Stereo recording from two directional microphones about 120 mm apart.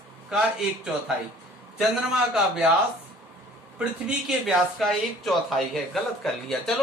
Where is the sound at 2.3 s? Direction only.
5° right (ahead or behind).